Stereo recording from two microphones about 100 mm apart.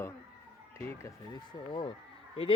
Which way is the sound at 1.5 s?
60° left (ahead or behind).